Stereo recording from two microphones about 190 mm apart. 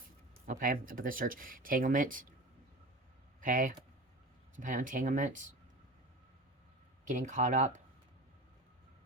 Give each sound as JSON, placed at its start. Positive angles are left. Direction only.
{"t": 0.4, "sound": "speech", "side_deg": -45}
{"t": 3.4, "sound": "speech", "side_deg": -45}
{"t": 7.0, "sound": "speech", "side_deg": -40}